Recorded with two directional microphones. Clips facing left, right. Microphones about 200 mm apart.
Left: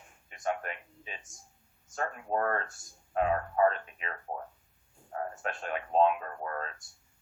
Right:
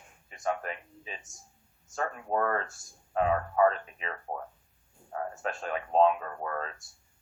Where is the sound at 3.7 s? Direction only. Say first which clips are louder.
Right 2 dB; 35° right (ahead or behind).